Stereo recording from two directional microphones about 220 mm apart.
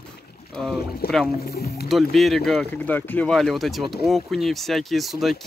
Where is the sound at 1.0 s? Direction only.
45° left (ahead or behind).